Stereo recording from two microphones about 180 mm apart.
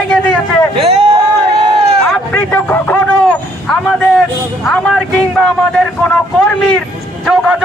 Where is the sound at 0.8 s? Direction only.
35° right (ahead or behind).